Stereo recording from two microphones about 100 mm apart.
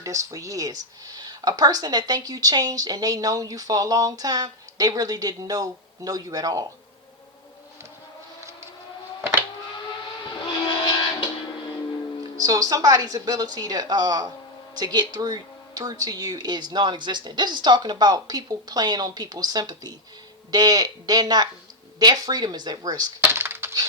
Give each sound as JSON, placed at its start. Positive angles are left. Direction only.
{"t": 0.0, "sound": "speech", "side_deg": -30}
{"t": 10.4, "sound": "train", "side_deg": 50}
{"t": 12.4, "sound": "a man's voice", "side_deg": -35}
{"t": 23.3, "sound": "a sound", "side_deg": -25}